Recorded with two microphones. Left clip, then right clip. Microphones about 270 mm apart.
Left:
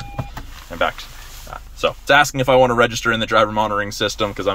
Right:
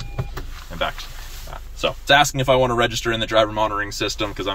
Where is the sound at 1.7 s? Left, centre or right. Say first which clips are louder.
Left 2 dB; centre.